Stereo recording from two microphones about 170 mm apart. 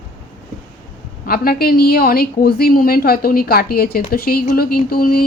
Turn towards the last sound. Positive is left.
turn(degrees=60)  # may be behind; listen again after turning